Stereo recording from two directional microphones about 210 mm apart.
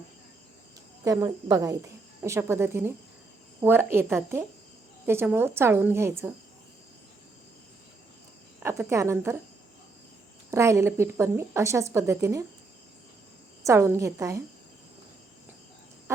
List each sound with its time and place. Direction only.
1.0 s a woman's voice: 15° right (ahead or behind)
8.6 s a woman's voice: 15° right (ahead or behind)
10.5 s a woman's voice: 15° right (ahead or behind)
13.7 s a woman's voice: 15° right (ahead or behind)